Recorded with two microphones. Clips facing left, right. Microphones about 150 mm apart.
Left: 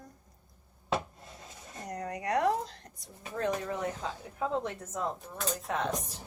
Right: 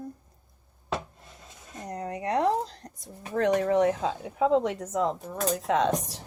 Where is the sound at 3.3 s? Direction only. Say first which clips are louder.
Right 10 dB; 80° right.